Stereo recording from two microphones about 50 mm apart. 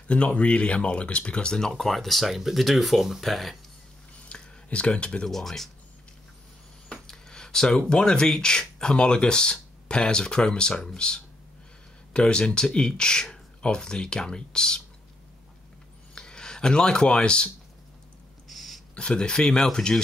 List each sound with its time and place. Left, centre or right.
0.1 s speech: left; by 3.5 s centre
4.3 s a sound: left
5.3 s speech: centre
6.9 s a sound: centre
7.9 s speech: centre
16.2 s speech: centre
18.5 s throat clearing: centre
18.9 s speech: centre